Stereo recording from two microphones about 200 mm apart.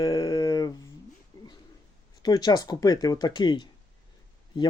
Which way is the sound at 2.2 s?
20° left (ahead or behind).